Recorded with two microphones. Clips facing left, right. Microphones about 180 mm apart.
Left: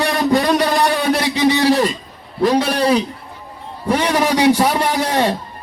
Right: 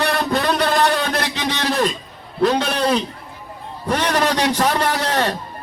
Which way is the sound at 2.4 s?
10° left (ahead or behind).